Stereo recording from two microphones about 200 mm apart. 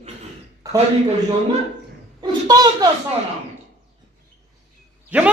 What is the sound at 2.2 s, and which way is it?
Speech, 20° right (ahead or behind).